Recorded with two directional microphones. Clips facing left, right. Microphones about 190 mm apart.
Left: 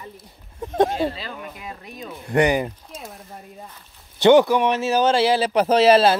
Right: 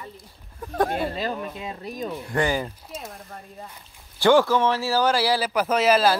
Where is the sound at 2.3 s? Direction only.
20° left (ahead or behind).